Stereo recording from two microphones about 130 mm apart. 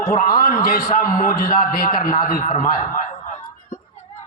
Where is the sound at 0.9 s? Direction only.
90° left.